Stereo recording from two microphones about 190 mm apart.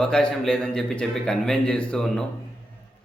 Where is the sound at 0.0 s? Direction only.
5° left (ahead or behind).